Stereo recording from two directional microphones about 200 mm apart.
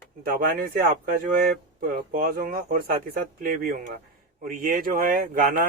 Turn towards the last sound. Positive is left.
turn(degrees=-45)  # may be behind; listen again after turning